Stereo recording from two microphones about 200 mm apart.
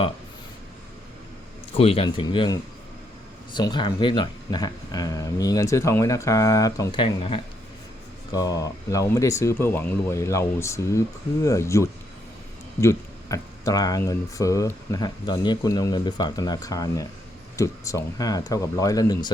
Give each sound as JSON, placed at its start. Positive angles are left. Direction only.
{"t": 1.7, "sound": "speech", "side_deg": 30}